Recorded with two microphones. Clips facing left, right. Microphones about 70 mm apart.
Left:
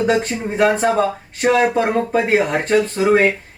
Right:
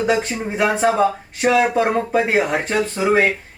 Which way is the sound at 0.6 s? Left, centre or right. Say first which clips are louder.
Left 1 dB; centre.